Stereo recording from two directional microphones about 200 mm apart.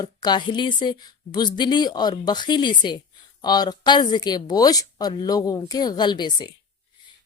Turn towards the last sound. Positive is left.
turn(degrees=20)  # may be behind; listen again after turning